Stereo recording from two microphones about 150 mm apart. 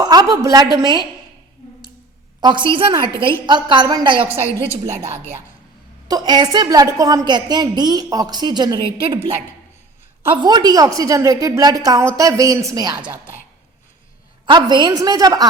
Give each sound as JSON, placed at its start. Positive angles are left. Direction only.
{"t": 0.0, "sound": "a woman's voice", "side_deg": -25}
{"t": 2.4, "sound": "a woman's voice", "side_deg": -30}
{"t": 6.1, "sound": "a woman's voice", "side_deg": -25}
{"t": 14.4, "sound": "a woman's voice", "side_deg": -30}